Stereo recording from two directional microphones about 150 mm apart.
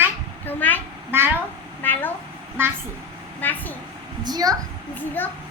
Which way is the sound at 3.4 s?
10° left (ahead or behind).